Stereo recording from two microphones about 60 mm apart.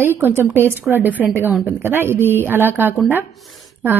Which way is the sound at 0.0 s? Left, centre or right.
Right.